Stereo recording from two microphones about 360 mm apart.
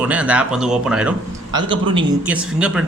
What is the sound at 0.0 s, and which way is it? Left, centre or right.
Speech, centre.